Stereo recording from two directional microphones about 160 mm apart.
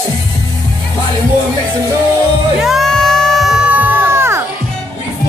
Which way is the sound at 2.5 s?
Centre (ahead or behind).